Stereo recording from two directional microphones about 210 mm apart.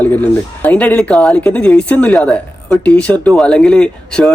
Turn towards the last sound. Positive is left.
turn(degrees=5)  # may be behind; listen again after turning